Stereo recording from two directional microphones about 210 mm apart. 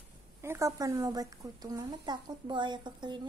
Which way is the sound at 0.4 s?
15° right (ahead or behind).